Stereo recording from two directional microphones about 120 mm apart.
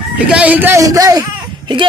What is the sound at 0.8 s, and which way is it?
Speech, 30° right (ahead or behind).